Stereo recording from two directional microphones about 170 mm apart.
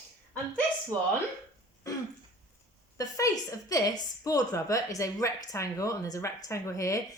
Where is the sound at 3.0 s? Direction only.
20° left (ahead or behind).